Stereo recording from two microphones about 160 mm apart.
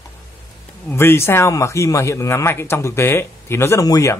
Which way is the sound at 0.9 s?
15° left (ahead or behind).